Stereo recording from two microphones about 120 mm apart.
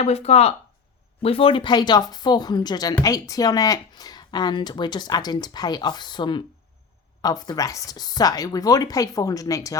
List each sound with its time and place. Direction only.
0.0 s speech: 60° left (ahead or behind); by 9.7 s 30° left (ahead or behind)